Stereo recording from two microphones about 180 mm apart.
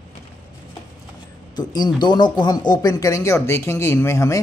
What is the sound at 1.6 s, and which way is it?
Speech, 25° left (ahead or behind).